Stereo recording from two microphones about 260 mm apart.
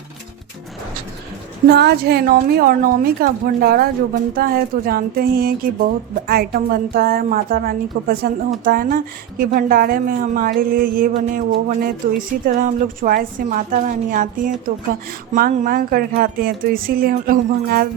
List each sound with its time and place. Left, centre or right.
1.7 s a woman's voice: right